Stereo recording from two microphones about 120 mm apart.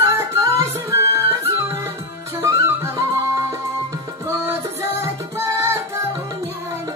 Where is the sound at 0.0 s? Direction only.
25° right (ahead or behind).